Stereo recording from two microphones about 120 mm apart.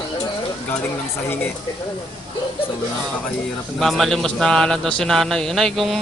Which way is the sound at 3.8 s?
Centre (ahead or behind).